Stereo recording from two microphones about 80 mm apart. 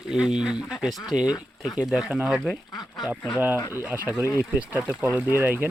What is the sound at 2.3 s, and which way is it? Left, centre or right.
Speech, centre.